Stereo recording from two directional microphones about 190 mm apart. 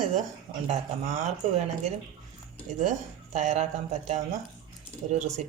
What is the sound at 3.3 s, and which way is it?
Speech, 35° right (ahead or behind).